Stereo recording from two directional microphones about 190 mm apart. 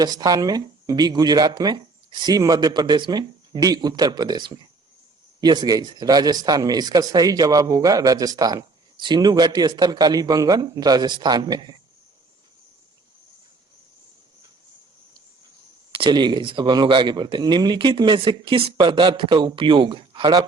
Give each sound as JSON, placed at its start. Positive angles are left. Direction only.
{"t": 0.0, "sound": "speech", "side_deg": -20}
{"t": 15.9, "sound": "speech", "side_deg": -25}